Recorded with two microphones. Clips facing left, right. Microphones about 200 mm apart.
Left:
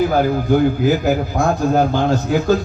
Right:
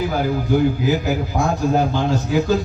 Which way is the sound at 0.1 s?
50° left (ahead or behind).